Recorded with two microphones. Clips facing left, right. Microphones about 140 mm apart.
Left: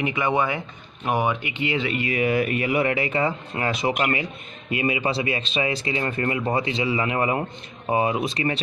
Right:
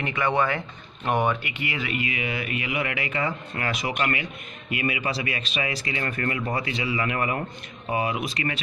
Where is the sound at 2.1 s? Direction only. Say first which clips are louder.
Left 8 dB; 45° left (ahead or behind).